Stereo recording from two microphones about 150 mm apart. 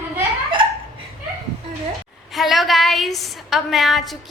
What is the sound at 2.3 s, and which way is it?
A woman's voice, centre (ahead or behind).